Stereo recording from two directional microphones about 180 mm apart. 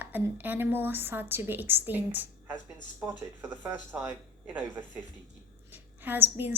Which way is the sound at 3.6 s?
10° right (ahead or behind).